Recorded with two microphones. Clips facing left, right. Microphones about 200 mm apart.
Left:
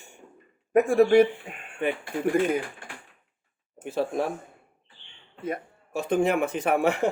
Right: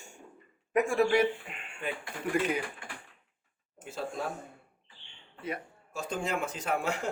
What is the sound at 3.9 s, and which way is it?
Speech, 70° left (ahead or behind).